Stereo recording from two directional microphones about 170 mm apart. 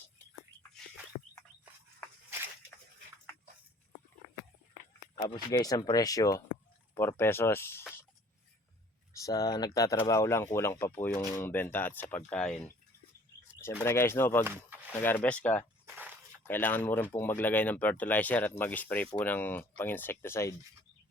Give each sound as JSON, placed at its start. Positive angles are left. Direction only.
{"t": 5.1, "sound": "speech", "side_deg": 25}
{"t": 9.1, "sound": "speech", "side_deg": 20}
{"t": 14.4, "sound": "speech", "side_deg": -10}
{"t": 14.9, "sound": "speech", "side_deg": 10}